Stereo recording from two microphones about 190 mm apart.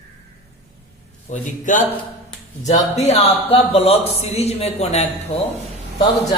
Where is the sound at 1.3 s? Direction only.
40° left (ahead or behind).